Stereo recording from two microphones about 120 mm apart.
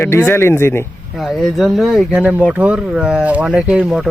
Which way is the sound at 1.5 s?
Centre (ahead or behind).